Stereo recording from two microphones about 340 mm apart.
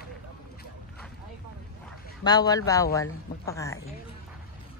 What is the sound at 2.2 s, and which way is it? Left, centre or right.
Speech, centre.